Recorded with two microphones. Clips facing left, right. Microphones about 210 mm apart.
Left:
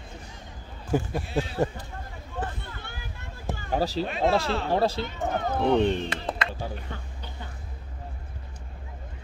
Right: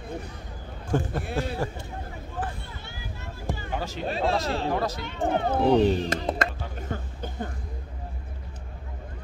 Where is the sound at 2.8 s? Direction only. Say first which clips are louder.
Right 2 dB; 55° left (ahead or behind).